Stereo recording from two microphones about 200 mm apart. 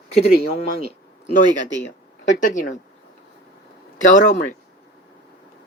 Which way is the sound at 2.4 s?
40° left (ahead or behind).